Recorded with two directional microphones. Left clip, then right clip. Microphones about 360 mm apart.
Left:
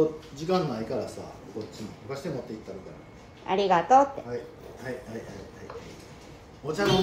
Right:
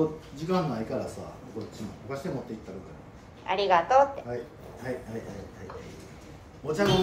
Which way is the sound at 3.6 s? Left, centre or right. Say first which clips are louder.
Left 1 dB; centre.